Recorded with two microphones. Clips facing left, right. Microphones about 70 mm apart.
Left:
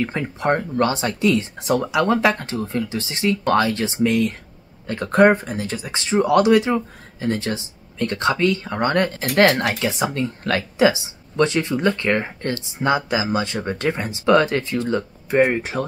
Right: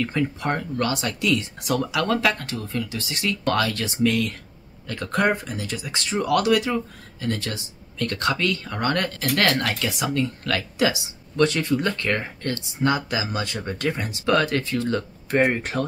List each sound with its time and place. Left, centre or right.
0.0 s speech: left
15.2 s speech: centre